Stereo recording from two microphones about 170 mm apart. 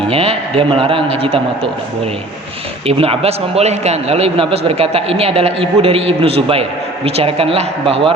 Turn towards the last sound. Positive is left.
turn(degrees=-35)  # may be behind; listen again after turning